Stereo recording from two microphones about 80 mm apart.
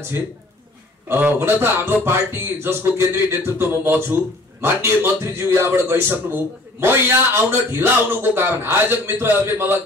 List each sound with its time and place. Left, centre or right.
1.0 s a man's voice: right